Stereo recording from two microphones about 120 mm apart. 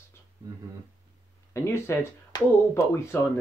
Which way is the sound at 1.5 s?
20° left (ahead or behind).